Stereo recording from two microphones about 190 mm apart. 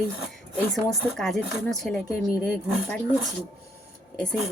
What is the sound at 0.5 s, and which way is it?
Speech, centre (ahead or behind).